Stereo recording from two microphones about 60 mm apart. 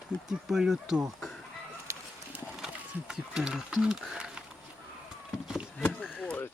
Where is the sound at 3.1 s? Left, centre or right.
Centre.